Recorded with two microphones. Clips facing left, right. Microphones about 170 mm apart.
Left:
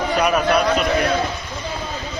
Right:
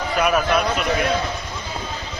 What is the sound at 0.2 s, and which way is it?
Speech, centre (ahead or behind).